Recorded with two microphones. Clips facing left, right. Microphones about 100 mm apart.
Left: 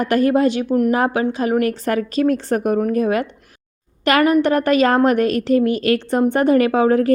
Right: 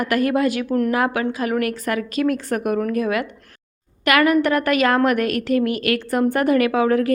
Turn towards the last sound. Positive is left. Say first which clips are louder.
# left 3 dB
turn(degrees=30)  # may be behind; listen again after turning